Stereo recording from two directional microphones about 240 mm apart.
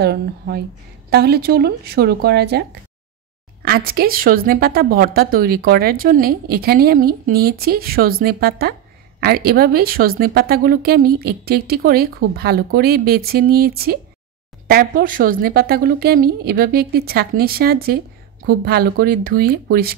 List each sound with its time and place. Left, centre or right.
0.0 s speech: right
3.6 s speech: right